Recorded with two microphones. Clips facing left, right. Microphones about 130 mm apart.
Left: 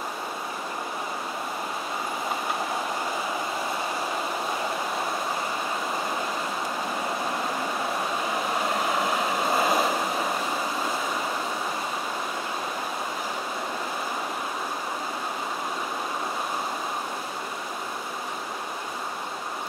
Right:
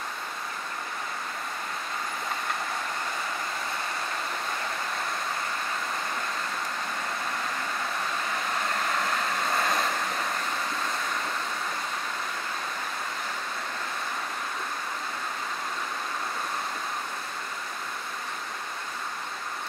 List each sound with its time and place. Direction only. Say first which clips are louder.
8.3 s vehicle: left 4 dB; 10° left (ahead or behind)